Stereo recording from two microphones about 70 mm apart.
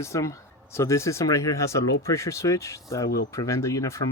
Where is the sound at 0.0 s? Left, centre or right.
Left.